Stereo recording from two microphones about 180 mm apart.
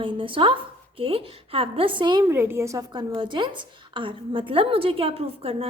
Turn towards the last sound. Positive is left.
turn(degrees=-30)  # may be behind; listen again after turning